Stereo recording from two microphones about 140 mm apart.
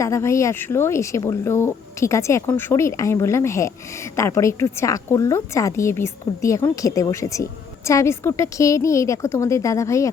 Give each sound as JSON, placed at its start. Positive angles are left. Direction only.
{"t": 0.0, "sound": "speech", "side_deg": 20}